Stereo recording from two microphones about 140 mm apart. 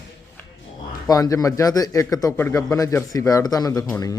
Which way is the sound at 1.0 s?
25° left (ahead or behind).